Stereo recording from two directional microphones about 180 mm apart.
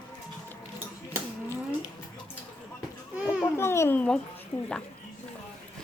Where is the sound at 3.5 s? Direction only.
15° left (ahead or behind).